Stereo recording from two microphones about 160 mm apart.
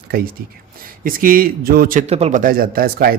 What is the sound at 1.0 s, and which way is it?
Speech, 60° right (ahead or behind).